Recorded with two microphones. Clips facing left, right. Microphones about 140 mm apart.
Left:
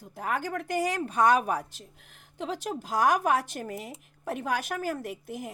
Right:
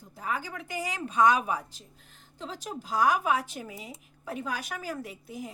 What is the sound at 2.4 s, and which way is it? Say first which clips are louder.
A woman's voice: left 5 dB; 65° left (ahead or behind).